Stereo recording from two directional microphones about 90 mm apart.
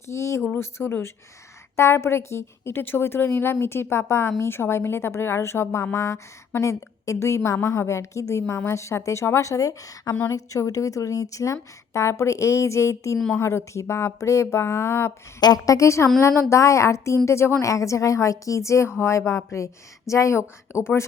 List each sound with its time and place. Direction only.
0.1 s a woman's voice: 30° left (ahead or behind)
15.4 s a woman's voice: 45° left (ahead or behind); by 21.0 s 30° left (ahead or behind)